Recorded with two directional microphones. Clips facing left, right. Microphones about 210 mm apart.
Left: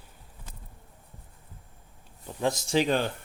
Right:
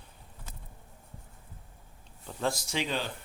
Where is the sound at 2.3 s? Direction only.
15° left (ahead or behind).